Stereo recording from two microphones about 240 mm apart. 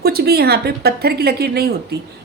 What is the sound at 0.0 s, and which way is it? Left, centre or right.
A woman's voice, right.